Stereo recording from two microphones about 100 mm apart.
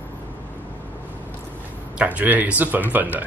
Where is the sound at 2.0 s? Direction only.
15° right (ahead or behind).